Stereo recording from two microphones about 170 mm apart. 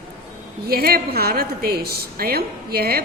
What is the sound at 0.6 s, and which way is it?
A woman's voice, 65° right (ahead or behind).